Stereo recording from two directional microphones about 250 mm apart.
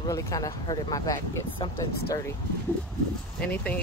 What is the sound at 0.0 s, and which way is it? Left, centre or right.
Speech, centre.